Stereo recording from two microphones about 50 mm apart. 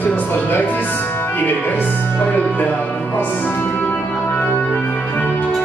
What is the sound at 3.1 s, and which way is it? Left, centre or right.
Music, left.